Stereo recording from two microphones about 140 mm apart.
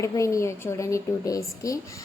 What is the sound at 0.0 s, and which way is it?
A woman's voice, 20° left (ahead or behind).